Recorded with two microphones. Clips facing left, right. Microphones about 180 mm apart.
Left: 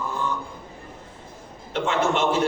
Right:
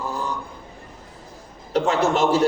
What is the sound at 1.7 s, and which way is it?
Speech, 40° right (ahead or behind).